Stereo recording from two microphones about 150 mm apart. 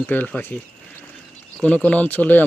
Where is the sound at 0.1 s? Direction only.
10° left (ahead or behind).